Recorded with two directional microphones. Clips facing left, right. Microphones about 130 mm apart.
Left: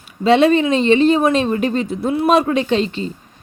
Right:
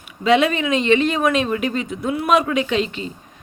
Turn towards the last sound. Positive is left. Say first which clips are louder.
# left 4 dB
turn(degrees=35)  # may be behind; listen again after turning